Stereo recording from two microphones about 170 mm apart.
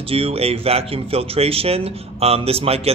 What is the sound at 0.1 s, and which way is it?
Speech, 35° right (ahead or behind).